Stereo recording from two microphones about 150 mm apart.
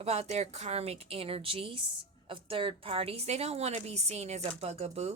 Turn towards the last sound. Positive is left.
turn(degrees=-45)  # may be behind; listen again after turning